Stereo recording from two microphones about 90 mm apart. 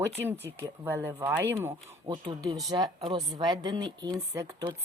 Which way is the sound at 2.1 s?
45° right (ahead or behind).